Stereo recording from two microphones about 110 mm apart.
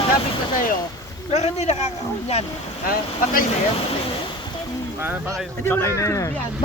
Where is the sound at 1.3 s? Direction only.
80° left.